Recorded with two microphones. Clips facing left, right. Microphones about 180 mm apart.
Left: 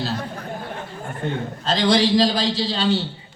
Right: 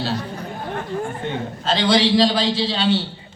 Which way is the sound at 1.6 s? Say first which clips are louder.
Even; 40° left (ahead or behind).